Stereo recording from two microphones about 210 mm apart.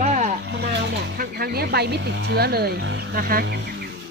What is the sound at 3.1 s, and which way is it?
Speech, 45° right (ahead or behind).